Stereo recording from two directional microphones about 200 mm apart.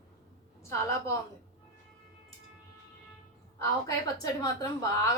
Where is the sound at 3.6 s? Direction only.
15° left (ahead or behind).